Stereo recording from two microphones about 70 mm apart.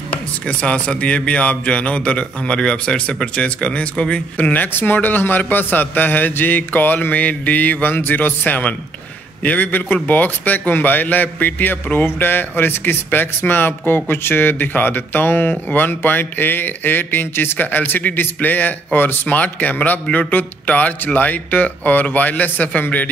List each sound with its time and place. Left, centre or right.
0.5 s a man's voice: centre